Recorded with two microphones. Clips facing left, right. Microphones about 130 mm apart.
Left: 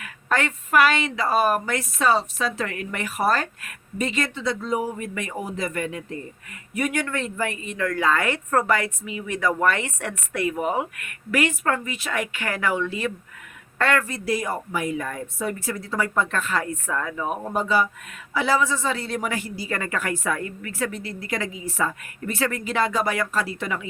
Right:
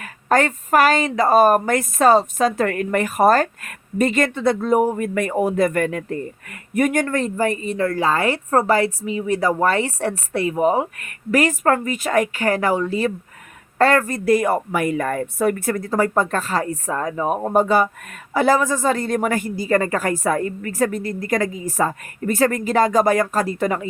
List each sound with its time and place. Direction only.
0.0 s a woman's voice: 40° right (ahead or behind)